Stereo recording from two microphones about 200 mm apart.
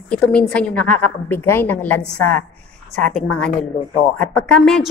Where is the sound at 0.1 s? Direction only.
5° left (ahead or behind).